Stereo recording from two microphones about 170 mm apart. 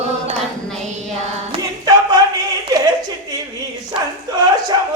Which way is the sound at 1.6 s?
20° right (ahead or behind).